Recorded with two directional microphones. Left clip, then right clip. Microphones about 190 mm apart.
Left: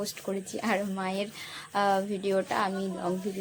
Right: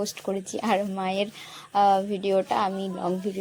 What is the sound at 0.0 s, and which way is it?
Speech, 20° right (ahead or behind).